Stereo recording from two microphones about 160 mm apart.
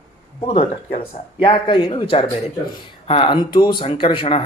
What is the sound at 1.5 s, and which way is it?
Speech, 30° left (ahead or behind).